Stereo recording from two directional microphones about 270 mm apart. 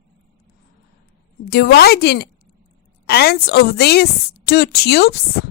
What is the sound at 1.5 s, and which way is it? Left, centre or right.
A woman's voice, left.